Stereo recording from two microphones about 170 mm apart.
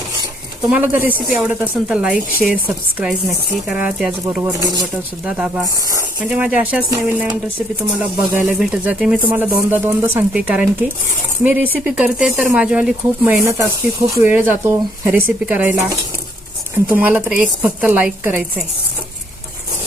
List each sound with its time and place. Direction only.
0.7 s a woman's voice: 10° right (ahead or behind)
4.5 s speech: 20° right (ahead or behind)
5.2 s speech: 5° right (ahead or behind)
5.6 s snake: 20° right (ahead or behind)
6.1 s speech: 5° right (ahead or behind)
7.9 s a woman's voice: 5° right (ahead or behind)